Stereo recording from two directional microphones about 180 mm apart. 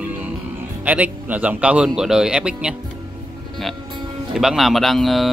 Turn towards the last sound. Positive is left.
turn(degrees=0)  # may be behind; listen again after turning